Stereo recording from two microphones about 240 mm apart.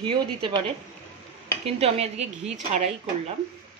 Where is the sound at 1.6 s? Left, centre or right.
Right.